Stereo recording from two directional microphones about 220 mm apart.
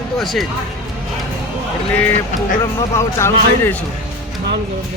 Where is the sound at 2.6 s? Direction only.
15° left (ahead or behind).